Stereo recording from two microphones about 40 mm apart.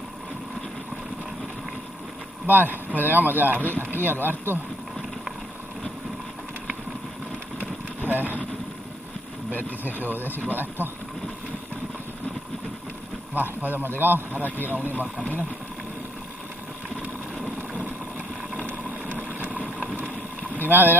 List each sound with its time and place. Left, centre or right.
2.4 s speech: right
8.0 s speech: right
9.5 s speech: left
9.9 s speech: right
13.3 s speech: right
14.3 s speech: right
19.0 s boat: right
19.6 s vehicle: centre
20.5 s speech: right